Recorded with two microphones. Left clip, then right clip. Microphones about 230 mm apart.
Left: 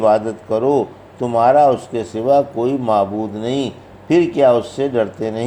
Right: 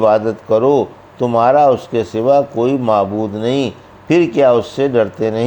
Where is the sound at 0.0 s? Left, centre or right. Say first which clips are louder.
Right 2 dB; right.